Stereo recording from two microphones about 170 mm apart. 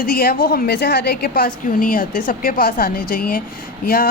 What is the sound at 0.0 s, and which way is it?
A woman's voice, 60° left (ahead or behind).